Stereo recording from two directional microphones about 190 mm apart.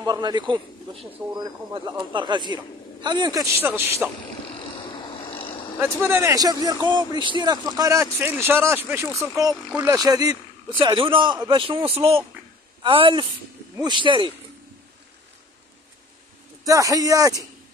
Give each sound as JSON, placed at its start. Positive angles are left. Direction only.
{"t": 0.0, "sound": "a man's voice", "side_deg": -20}
{"t": 4.6, "sound": "vehicle", "side_deg": 25}
{"t": 5.8, "sound": "a man's voice", "side_deg": -10}
{"t": 9.9, "sound": "a man's voice", "side_deg": -20}
{"t": 16.6, "sound": "speech", "side_deg": -15}